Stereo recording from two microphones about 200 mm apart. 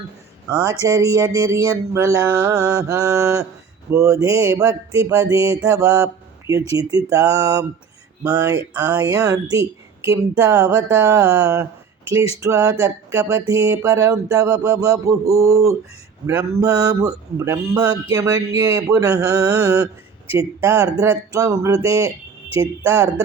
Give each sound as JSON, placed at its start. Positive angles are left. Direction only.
{"t": 0.6, "sound": "speech", "side_deg": -15}